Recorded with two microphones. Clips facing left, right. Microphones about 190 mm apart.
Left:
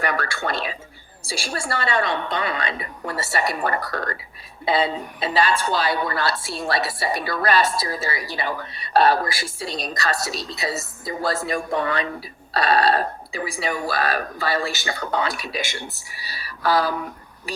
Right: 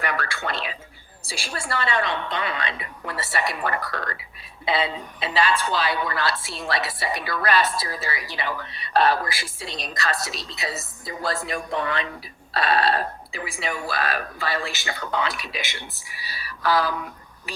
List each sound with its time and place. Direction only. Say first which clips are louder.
0.0 s a woman's voice: left 3 dB; 40° left (ahead or behind)